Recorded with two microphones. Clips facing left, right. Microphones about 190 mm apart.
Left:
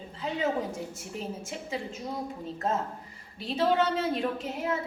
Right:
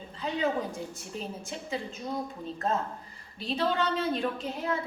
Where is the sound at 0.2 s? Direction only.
25° left (ahead or behind).